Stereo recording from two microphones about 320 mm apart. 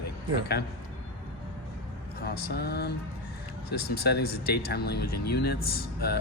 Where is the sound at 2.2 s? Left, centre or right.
Left.